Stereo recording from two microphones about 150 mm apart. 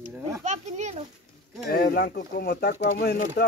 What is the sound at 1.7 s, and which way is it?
Speech, 80° left.